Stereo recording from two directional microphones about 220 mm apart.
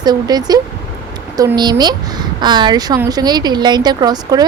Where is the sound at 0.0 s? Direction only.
20° right (ahead or behind).